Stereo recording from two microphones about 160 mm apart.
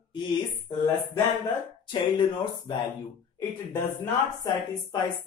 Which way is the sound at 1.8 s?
30° left (ahead or behind).